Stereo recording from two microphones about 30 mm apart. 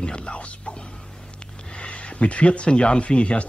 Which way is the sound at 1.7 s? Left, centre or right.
Left.